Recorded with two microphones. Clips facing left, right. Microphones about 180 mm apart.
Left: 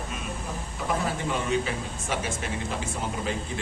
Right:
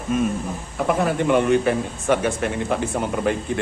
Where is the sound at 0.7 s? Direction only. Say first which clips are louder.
Right 9 dB; 65° right (ahead or behind).